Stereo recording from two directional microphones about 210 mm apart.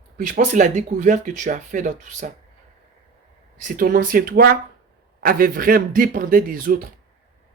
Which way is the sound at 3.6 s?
40° right (ahead or behind).